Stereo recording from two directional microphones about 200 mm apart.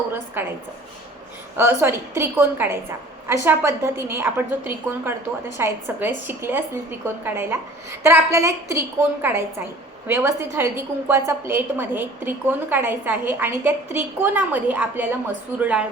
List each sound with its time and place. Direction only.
0.4 s a woman's voice: 10° right (ahead or behind)
1.5 s a woman's voice: 10° right (ahead or behind)